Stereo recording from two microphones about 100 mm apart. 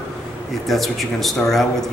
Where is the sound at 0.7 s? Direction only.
Centre (ahead or behind).